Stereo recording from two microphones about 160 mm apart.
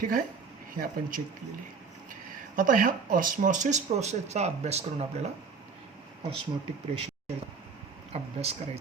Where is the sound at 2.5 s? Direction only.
60° right (ahead or behind).